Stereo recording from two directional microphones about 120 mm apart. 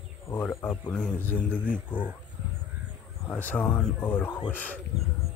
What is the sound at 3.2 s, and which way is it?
Speech, 15° left (ahead or behind).